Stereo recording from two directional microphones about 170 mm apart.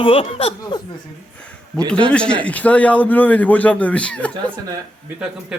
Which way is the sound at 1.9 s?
5° left (ahead or behind).